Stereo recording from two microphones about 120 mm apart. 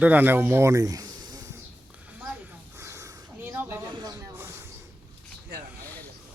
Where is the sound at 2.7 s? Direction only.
25° right (ahead or behind).